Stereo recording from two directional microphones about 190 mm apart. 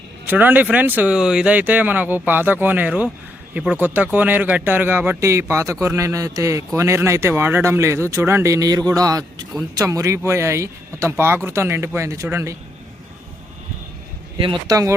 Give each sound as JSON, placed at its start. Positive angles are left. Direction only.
{"t": 0.3, "sound": "speech", "side_deg": -10}
{"t": 14.3, "sound": "speech", "side_deg": -25}